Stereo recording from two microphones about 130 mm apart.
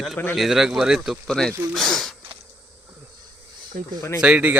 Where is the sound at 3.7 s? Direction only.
90° right.